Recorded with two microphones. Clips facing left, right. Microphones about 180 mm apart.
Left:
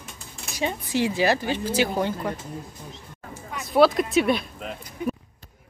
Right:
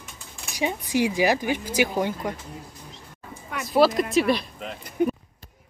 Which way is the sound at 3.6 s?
Centre (ahead or behind).